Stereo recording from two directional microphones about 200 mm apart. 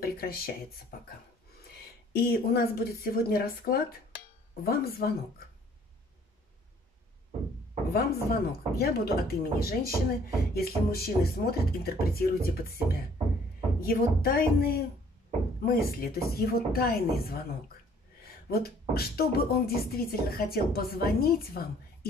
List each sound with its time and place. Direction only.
0.0 s speech: 50° left (ahead or behind)
7.9 s speech: 50° left (ahead or behind)